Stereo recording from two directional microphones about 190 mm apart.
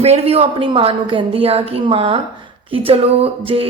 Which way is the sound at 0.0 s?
35° right (ahead or behind).